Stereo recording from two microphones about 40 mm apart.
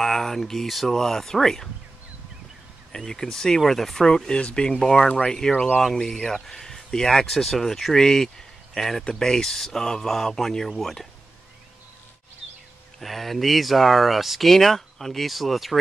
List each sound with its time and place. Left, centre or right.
0.0 s speech: centre
3.1 s speech: centre
13.0 s speech: centre